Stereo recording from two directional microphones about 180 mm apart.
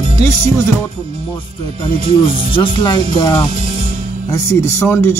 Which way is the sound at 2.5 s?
25° left (ahead or behind).